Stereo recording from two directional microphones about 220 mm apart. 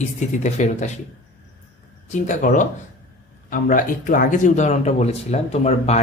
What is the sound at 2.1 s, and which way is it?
Speech, 35° left (ahead or behind).